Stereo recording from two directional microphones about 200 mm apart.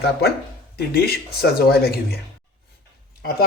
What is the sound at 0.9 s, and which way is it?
Speech, 50° left (ahead or behind).